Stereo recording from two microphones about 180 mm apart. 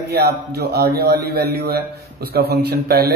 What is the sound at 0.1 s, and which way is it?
Speech, 65° right (ahead or behind).